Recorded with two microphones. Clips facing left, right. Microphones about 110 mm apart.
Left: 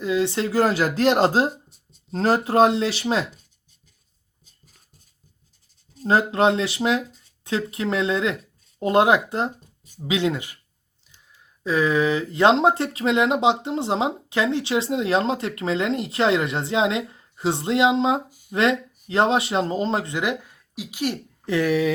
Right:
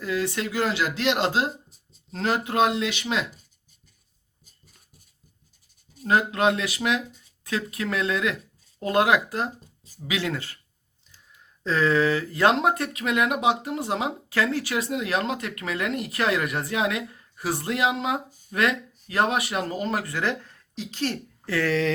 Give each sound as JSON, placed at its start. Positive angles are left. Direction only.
{"t": 0.0, "sound": "speech", "side_deg": 20}
{"t": 1.7, "sound": "a sound", "side_deg": 0}
{"t": 2.1, "sound": "speech", "side_deg": 35}
{"t": 6.0, "sound": "speech", "side_deg": 30}
{"t": 11.6, "sound": "speech", "side_deg": 15}
{"t": 18.3, "sound": "a sound", "side_deg": 10}
{"t": 18.5, "sound": "speech", "side_deg": 25}